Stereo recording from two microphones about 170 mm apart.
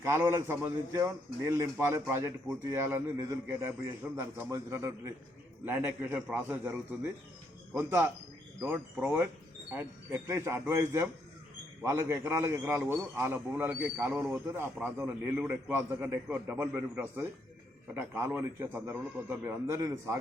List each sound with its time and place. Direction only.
0.0 s a man's voice: 15° right (ahead or behind)